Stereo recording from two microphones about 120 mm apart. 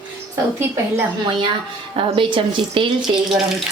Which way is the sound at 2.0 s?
45° right (ahead or behind).